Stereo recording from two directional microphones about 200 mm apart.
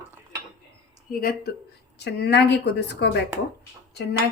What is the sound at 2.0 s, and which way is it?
A woman's voice, 55° left (ahead or behind).